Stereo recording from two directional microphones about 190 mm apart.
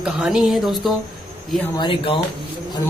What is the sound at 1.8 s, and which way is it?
Speech, 25° left (ahead or behind).